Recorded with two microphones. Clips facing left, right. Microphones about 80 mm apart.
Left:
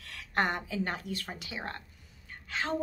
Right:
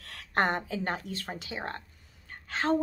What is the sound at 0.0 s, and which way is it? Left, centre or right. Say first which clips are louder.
A woman's voice: right 3 dB; right.